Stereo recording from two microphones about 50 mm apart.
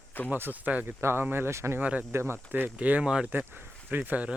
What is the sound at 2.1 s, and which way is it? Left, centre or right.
Speech, right.